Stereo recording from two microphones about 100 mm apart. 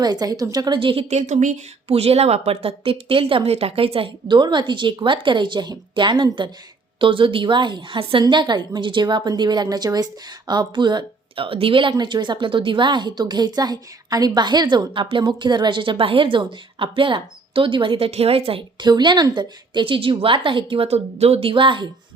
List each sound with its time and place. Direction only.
0.0 s a woman's voice: 40° right (ahead or behind)
0.8 s a woman's voice: 65° right (ahead or behind)
1.9 s a woman's voice: 80° right
4.3 s a woman's voice: 50° right (ahead or behind); by 18.6 s 75° right (ahead or behind)
18.8 s a woman's voice: 50° right (ahead or behind)